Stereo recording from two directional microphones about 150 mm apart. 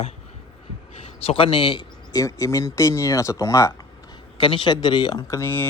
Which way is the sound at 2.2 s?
20° left (ahead or behind).